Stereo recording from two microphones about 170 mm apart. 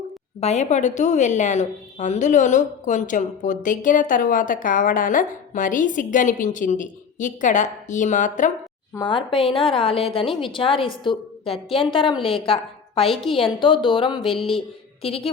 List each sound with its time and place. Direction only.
0.3 s a woman's voice: 40° left (ahead or behind)
9.0 s a woman's voice: 30° left (ahead or behind)
14.3 s music: centre (ahead or behind)
15.0 s a woman's voice: 35° left (ahead or behind)